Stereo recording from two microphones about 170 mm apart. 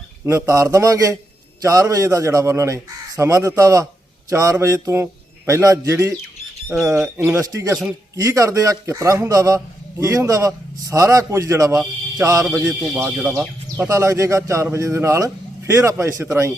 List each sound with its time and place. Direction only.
0.3 s a man's voice: 20° right (ahead or behind)
6.9 s speech: 5° right (ahead or behind)
8.1 s a man's voice: 15° right (ahead or behind)
11.8 s music: 15° right (ahead or behind)
12.5 s a man's voice: 5° right (ahead or behind)